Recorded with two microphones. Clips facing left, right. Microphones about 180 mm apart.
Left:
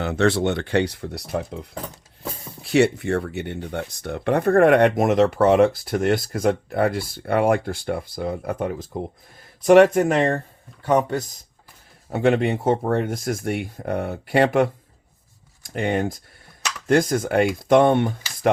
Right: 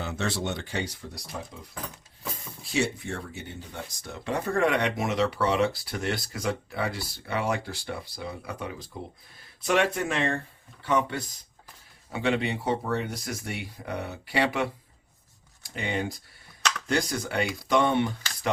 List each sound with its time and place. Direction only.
0.0 s speech: 65° left (ahead or behind)
2.6 s speech: 65° left (ahead or behind)